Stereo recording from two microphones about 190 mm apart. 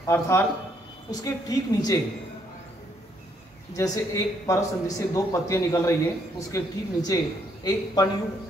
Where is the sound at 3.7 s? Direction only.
20° left (ahead or behind).